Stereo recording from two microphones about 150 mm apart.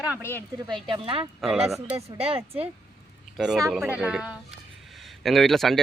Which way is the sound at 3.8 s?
10° right (ahead or behind).